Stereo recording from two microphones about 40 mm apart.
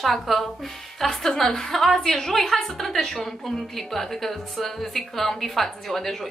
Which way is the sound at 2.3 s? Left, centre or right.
Centre.